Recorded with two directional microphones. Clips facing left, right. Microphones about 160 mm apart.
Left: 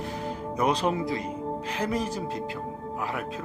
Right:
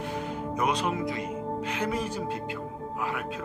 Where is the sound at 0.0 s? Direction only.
35° left (ahead or behind).